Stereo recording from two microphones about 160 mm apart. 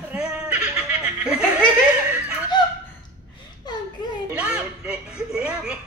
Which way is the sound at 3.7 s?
25° left (ahead or behind).